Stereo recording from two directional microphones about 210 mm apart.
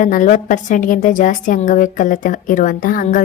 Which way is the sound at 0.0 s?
35° left (ahead or behind).